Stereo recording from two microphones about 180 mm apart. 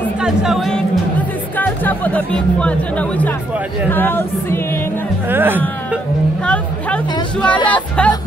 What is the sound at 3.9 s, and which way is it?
Music, 10° left (ahead or behind).